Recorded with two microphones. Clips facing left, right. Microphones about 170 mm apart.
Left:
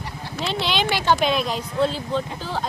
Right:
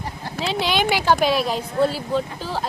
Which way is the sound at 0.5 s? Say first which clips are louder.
Right 3 dB; 10° right (ahead or behind).